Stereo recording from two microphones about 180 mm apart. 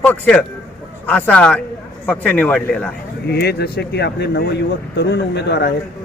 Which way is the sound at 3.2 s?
65° left (ahead or behind).